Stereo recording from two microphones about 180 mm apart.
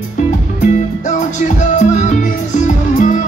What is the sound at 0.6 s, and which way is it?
Music, 45° left (ahead or behind).